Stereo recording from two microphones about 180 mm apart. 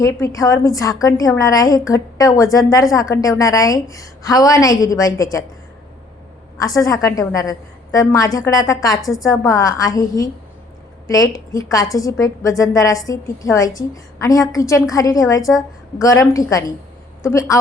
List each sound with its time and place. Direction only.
0.0 s a woman's voice: 20° left (ahead or behind)
6.6 s a woman's voice: 20° left (ahead or behind)